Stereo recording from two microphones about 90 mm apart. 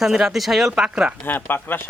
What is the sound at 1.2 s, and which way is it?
Speech, 20° left (ahead or behind).